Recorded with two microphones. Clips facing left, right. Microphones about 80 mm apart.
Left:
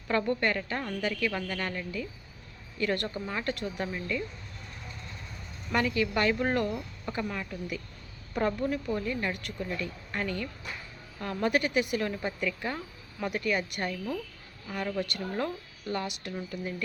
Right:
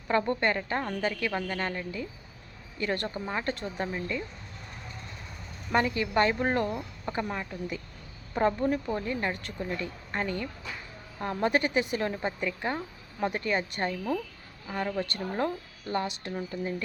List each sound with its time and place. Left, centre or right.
0.1 s speech: right
5.7 s speech: right